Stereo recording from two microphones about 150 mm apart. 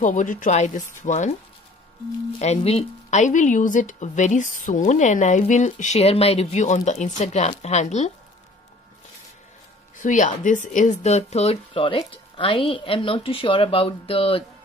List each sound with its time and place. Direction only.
0.0 s speech: 60° left (ahead or behind)
2.3 s speech: 45° left (ahead or behind)
9.9 s speech: 60° left (ahead or behind); by 14.4 s 40° left (ahead or behind)